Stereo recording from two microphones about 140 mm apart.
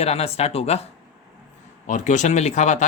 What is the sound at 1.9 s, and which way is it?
Speech, 60° left (ahead or behind).